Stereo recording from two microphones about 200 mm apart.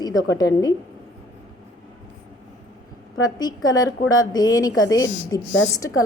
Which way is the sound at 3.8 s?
90° left.